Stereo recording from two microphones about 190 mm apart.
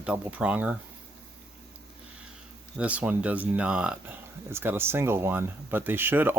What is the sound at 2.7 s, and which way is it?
Speech, 5° right (ahead or behind).